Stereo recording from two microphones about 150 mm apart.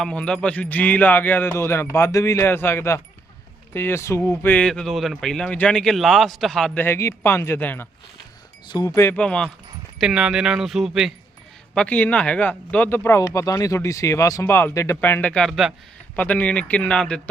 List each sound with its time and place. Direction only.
0.0 s speech: 5° left (ahead or behind)
6.8 s speech: 15° left (ahead or behind)
8.6 s speech: 30° left (ahead or behind)
9.0 s speech: 15° left (ahead or behind)